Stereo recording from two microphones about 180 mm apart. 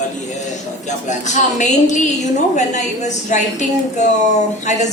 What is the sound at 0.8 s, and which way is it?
A woman's voice, 40° left (ahead or behind).